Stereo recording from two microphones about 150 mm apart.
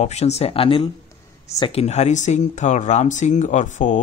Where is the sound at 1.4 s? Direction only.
25° left (ahead or behind).